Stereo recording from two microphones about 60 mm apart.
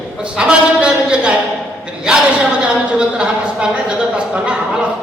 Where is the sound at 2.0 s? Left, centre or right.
Centre.